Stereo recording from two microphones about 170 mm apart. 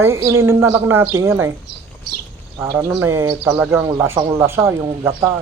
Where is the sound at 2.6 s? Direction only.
15° right (ahead or behind).